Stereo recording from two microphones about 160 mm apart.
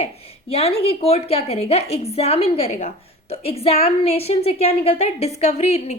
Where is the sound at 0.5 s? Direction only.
40° left (ahead or behind).